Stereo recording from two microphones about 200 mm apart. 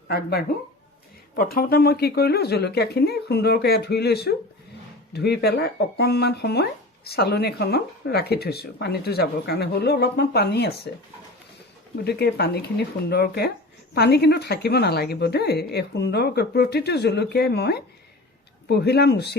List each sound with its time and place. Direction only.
0.1 s speech: 50° left (ahead or behind)
12.0 s a woman's voice: 55° left (ahead or behind)